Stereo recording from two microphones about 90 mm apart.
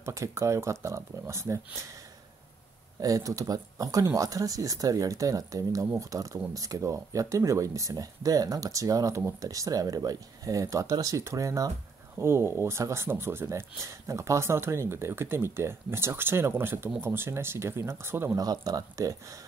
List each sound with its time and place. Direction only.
0.0 s speech: 35° right (ahead or behind)
3.0 s speech: 40° right (ahead or behind)
12.2 s speech: 30° right (ahead or behind)
18.3 s speech: 45° right (ahead or behind)